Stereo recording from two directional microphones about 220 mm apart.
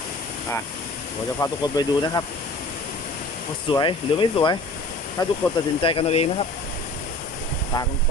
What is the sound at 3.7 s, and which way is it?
Speech, 20° left (ahead or behind).